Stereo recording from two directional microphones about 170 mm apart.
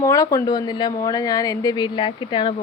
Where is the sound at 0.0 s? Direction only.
20° left (ahead or behind).